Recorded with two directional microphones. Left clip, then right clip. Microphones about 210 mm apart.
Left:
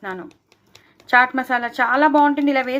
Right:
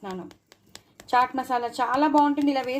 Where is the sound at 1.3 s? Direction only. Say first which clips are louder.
Left 5 dB; 10° left (ahead or behind).